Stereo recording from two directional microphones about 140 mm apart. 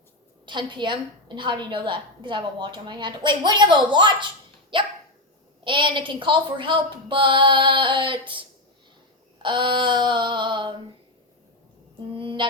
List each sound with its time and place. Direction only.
0.4 s a woman's voice: 35° right (ahead or behind)
9.4 s a woman's voice: 35° right (ahead or behind)
12.1 s mantra: 40° right (ahead or behind)